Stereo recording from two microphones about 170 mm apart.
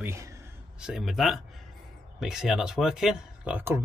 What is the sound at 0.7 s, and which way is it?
Speech, 5° right (ahead or behind).